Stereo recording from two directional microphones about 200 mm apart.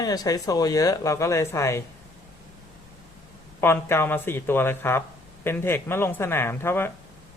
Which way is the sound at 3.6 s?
10° left (ahead or behind).